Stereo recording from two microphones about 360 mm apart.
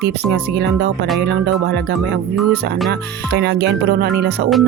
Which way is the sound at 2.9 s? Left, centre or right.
Right.